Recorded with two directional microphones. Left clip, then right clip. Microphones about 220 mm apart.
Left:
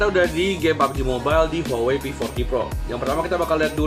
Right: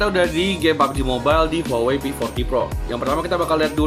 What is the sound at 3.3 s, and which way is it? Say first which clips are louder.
Speech: right 2 dB; 45° right (ahead or behind).